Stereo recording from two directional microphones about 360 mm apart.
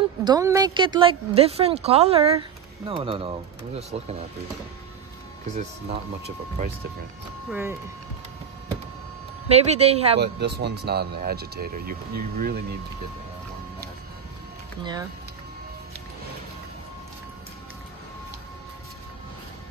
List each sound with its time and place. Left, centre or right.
0.2 s a woman's voice: centre
5.5 s speech: centre
7.4 s speech: centre
9.5 s a woman's voice: centre
10.2 s speech: right
14.8 s a woman's voice: centre